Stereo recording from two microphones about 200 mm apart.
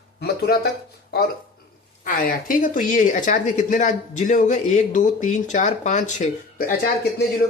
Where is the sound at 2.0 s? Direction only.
40° left (ahead or behind).